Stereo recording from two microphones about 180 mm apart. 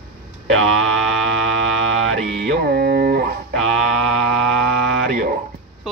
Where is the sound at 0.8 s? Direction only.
Centre (ahead or behind).